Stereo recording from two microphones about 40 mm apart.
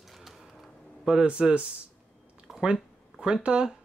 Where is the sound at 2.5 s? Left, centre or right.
Centre.